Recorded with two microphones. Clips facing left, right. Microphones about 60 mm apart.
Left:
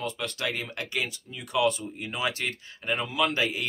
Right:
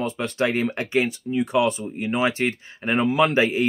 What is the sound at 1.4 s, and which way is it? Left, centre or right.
Speech, right.